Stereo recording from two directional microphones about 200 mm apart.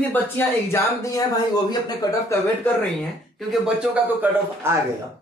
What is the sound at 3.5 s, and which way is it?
A man's voice, 10° right (ahead or behind).